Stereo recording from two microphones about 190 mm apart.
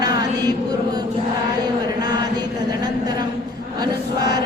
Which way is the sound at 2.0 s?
20° right (ahead or behind).